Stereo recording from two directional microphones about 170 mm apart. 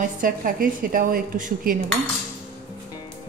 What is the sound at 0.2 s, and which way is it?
A woman's voice, 55° right (ahead or behind).